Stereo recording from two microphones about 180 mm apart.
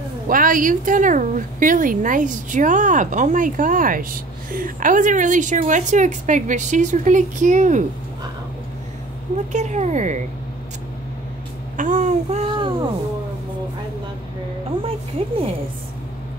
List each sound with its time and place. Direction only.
0.3 s a woman's voice: 50° right (ahead or behind)
9.5 s speech: 40° right (ahead or behind)
11.7 s speech: 45° right (ahead or behind); by 12.8 s 25° right (ahead or behind)